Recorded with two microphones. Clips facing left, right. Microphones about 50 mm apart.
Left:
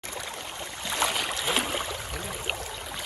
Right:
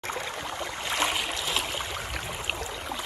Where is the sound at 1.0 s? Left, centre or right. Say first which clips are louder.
Even; right.